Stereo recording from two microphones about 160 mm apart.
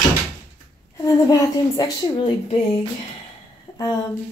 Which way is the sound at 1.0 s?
25° left (ahead or behind).